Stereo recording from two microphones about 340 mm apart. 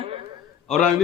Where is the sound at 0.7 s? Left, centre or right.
Centre.